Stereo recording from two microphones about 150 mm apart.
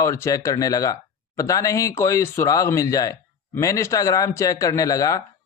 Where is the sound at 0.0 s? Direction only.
20° left (ahead or behind).